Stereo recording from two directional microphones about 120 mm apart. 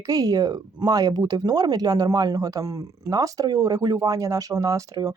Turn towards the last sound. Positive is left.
turn(degrees=-30)  # may be behind; listen again after turning